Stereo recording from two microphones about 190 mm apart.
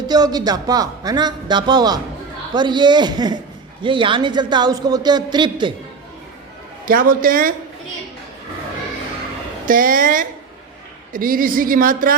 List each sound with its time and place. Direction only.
0.1 s a man's voice: 20° right (ahead or behind)
6.8 s a woman's voice: 45° right (ahead or behind)
9.6 s a woman's voice: 45° right (ahead or behind)